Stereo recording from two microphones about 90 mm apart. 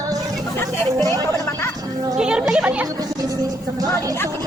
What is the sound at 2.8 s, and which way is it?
Music, 45° right (ahead or behind).